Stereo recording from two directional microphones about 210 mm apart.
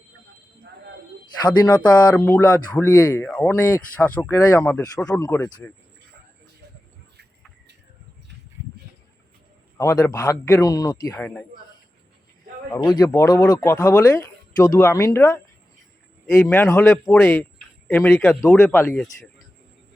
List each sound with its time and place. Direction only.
1.4 s speech: 20° left (ahead or behind)
9.7 s speech: 15° left (ahead or behind)
12.7 s a man's voice: 20° left (ahead or behind)